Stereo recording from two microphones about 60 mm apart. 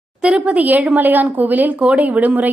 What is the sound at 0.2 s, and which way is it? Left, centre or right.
A woman's voice, centre.